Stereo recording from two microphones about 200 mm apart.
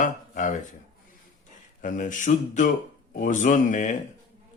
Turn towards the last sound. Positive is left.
turn(degrees=40)  # may be behind; listen again after turning